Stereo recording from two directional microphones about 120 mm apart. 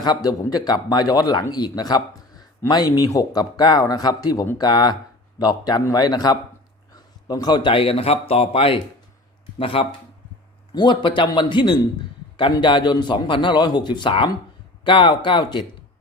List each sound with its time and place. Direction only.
0.0 s a man's voice: 35° left (ahead or behind)